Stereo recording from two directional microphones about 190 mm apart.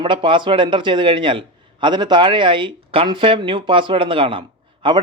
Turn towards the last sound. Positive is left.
turn(degrees=-25)  # may be behind; listen again after turning